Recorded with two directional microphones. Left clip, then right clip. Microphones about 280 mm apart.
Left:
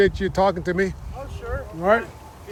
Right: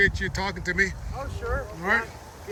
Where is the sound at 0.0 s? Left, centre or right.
Centre.